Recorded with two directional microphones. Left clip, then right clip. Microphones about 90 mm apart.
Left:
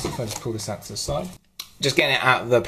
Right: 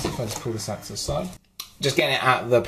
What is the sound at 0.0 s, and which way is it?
Speech, 25° left (ahead or behind).